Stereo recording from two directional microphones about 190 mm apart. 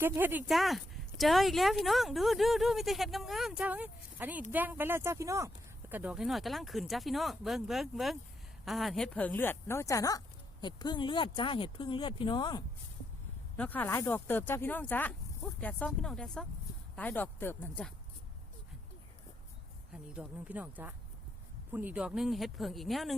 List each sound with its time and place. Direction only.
0.0 s speech: 10° right (ahead or behind); by 12.6 s 25° left (ahead or behind)
13.6 s speech: 10° left (ahead or behind)
19.9 s speech: 5° right (ahead or behind)